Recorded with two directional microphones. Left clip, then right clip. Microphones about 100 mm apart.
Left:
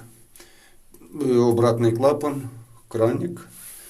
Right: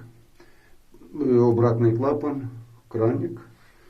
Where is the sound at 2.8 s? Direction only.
15° left (ahead or behind).